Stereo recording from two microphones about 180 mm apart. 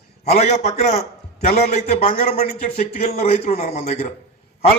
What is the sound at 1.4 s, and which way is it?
A man's voice, 40° left (ahead or behind).